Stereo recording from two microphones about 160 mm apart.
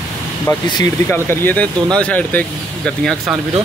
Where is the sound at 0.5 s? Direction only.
20° left (ahead or behind); by 3.2 s 5° left (ahead or behind).